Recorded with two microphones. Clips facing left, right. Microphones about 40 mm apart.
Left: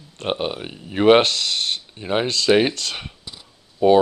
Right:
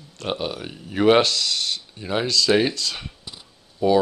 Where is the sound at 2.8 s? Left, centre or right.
Left.